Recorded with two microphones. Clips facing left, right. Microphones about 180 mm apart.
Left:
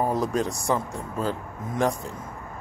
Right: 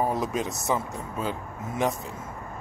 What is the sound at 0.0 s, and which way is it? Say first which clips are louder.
Speech: left 2 dB; centre (ahead or behind).